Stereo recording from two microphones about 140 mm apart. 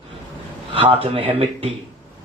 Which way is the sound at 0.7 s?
40° right (ahead or behind).